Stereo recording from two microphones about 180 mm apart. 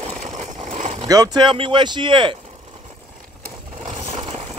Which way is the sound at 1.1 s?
20° right (ahead or behind).